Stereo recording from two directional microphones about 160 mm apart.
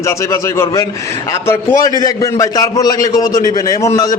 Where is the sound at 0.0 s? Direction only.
20° left (ahead or behind).